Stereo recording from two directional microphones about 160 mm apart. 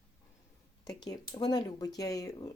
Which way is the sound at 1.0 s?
25° left (ahead or behind).